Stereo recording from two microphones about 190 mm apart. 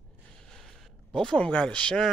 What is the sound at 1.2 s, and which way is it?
Speech, 5° left (ahead or behind).